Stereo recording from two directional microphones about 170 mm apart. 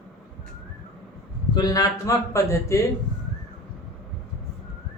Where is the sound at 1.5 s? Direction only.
20° left (ahead or behind).